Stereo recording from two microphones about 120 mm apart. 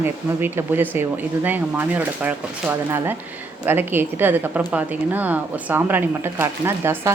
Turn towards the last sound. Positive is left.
turn(degrees=-20)  # may be behind; listen again after turning